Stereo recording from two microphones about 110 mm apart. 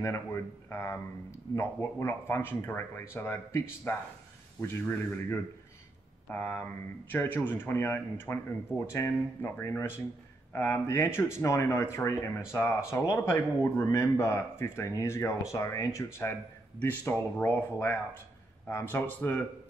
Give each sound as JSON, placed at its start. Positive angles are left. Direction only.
{"t": 0.0, "sound": "speech", "side_deg": 25}